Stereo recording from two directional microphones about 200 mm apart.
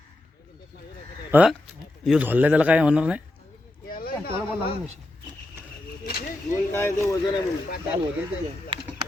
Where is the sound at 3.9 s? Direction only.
50° left (ahead or behind).